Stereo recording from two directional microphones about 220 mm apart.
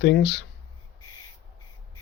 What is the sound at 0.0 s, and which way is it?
Speech, 50° left (ahead or behind).